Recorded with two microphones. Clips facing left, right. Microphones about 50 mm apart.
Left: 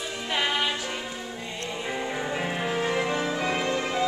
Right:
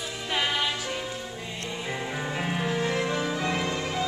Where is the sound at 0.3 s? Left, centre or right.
Centre.